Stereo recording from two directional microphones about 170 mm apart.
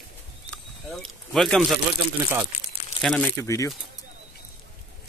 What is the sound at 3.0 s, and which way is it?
Speech, 25° left (ahead or behind).